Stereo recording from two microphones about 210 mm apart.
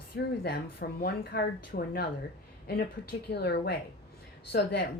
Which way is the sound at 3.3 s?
50° left (ahead or behind).